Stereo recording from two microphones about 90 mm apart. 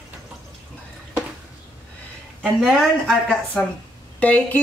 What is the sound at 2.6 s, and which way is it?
Speech, 5° left (ahead or behind).